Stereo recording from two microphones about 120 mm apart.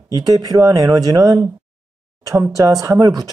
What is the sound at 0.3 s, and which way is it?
Speech, 30° right (ahead or behind).